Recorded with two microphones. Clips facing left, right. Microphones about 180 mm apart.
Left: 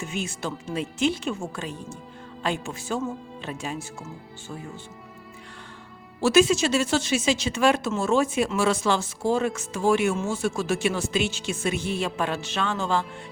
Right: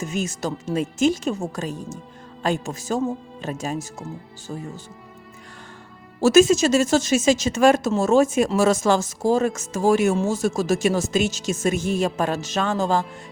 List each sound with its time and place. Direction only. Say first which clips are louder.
0.0 s speech: right 5 dB; 40° right (ahead or behind)
6.1 s speech: right 4 dB; 45° right (ahead or behind)